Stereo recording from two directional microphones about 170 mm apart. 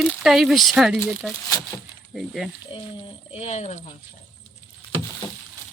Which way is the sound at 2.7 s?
30° left (ahead or behind).